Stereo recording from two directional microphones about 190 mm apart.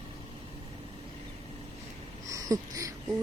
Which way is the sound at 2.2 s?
15° right (ahead or behind).